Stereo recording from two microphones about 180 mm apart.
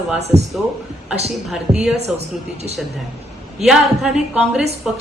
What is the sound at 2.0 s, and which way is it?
Speech, 35° right (ahead or behind).